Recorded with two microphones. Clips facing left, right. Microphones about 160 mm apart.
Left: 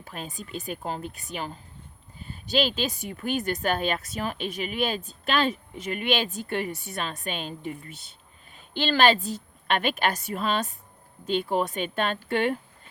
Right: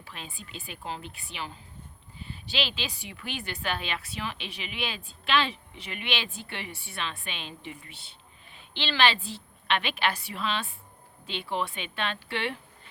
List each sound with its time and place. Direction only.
0.0 s a woman's voice: 45° left (ahead or behind)